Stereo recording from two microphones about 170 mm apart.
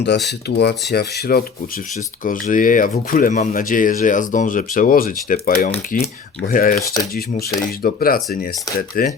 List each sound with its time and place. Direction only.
0.3 s speech: 75° left (ahead or behind)
2.5 s speech: 50° left (ahead or behind)
6.8 s speech: 20° left (ahead or behind)
7.1 s speech: 65° left (ahead or behind)